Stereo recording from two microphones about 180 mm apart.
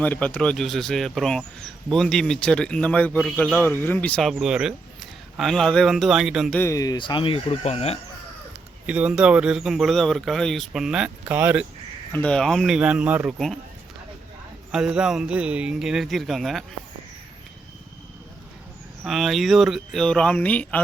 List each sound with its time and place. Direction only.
0.0 s a man's voice: 10° left (ahead or behind)
6.6 s speech: 15° left (ahead or behind); by 7.9 s 35° left (ahead or behind)
8.9 s a man's voice: 5° right (ahead or behind)
12.1 s a man's voice: 5° left (ahead or behind)
14.7 s a man's voice: 5° right (ahead or behind)
19.0 s a man's voice: centre (ahead or behind)